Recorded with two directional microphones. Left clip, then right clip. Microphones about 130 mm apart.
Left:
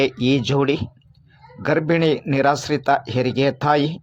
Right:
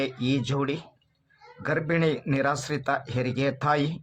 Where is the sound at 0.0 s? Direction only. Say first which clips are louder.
Left 9 dB; 40° left (ahead or behind).